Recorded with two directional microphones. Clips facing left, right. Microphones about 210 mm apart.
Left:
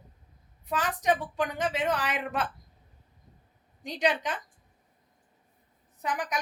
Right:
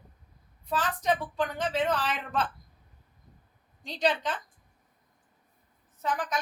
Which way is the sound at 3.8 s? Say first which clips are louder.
Even; 15° left (ahead or behind).